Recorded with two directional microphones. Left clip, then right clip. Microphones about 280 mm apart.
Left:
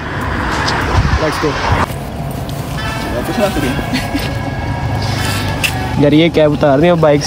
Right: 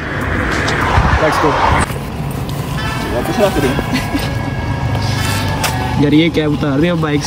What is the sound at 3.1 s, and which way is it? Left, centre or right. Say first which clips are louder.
Speech: right 2 dB; centre.